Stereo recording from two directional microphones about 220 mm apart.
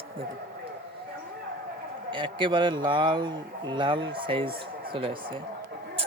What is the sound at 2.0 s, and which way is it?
A man's voice, 20° right (ahead or behind).